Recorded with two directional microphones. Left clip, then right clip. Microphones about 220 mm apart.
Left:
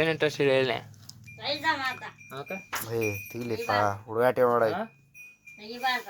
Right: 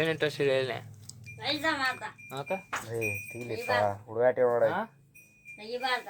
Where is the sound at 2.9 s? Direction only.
50° left (ahead or behind).